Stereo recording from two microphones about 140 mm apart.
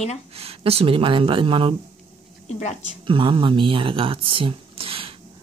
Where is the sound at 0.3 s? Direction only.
45° right (ahead or behind).